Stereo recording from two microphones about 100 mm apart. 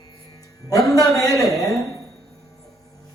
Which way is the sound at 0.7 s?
35° left (ahead or behind).